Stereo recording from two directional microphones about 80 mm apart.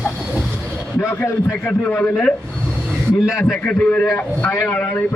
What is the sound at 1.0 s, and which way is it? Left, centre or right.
Speech, left.